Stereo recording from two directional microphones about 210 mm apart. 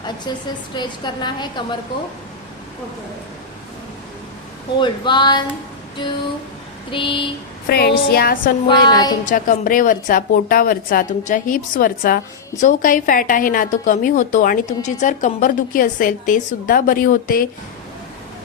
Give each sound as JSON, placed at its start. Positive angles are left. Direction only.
{"t": 0.3, "sound": "a woman's voice", "side_deg": 20}
{"t": 4.8, "sound": "a woman's voice", "side_deg": 20}
{"t": 7.7, "sound": "speech", "side_deg": 50}
{"t": 8.6, "sound": "a woman's voice", "side_deg": 20}
{"t": 9.2, "sound": "a woman's voice", "side_deg": 40}